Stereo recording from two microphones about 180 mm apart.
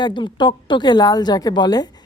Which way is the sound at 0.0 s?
25° left (ahead or behind).